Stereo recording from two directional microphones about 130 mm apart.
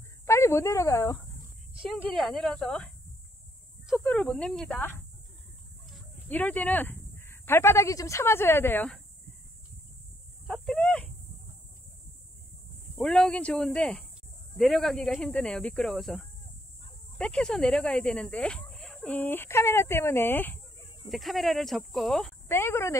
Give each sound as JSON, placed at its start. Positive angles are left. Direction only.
{"t": 0.3, "sound": "speech", "side_deg": 20}
{"t": 2.0, "sound": "speech", "side_deg": 5}
{"t": 4.0, "sound": "speech", "side_deg": 10}
{"t": 4.7, "sound": "speech", "side_deg": 15}
{"t": 6.2, "sound": "speech", "side_deg": 15}
{"t": 10.4, "sound": "a sound", "side_deg": 5}
{"t": 12.9, "sound": "speech", "side_deg": 5}
{"t": 21.1, "sound": "speech", "side_deg": 0}
{"t": 22.5, "sound": "speech", "side_deg": 20}